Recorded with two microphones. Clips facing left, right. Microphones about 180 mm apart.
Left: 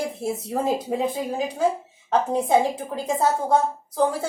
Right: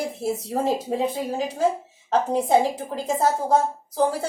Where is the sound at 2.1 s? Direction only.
30° right (ahead or behind).